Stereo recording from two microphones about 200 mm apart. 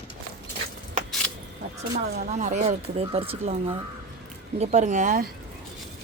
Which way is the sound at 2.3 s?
35° right (ahead or behind).